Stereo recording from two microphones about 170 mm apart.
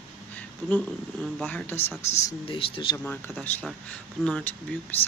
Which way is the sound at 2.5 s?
30° left (ahead or behind).